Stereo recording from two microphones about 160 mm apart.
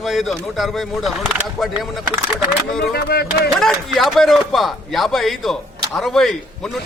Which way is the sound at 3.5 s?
Centre (ahead or behind).